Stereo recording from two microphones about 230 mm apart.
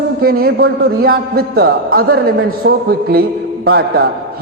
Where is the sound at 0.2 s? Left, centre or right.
Right.